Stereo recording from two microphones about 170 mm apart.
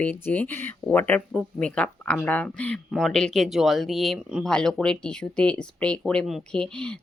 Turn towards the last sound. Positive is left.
turn(degrees=5)  # may be behind; listen again after turning